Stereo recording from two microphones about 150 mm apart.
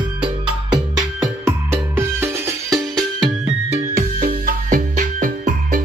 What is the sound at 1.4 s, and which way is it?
Music, 15° right (ahead or behind).